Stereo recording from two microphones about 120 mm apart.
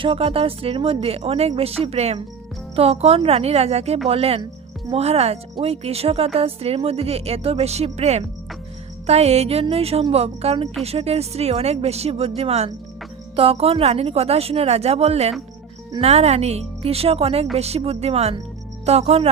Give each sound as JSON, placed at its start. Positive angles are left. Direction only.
{"t": 0.0, "sound": "speech", "side_deg": -50}